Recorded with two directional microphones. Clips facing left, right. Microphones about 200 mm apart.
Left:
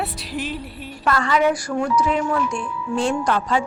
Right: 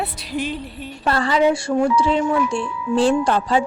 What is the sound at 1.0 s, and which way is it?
Speech, 30° right (ahead or behind).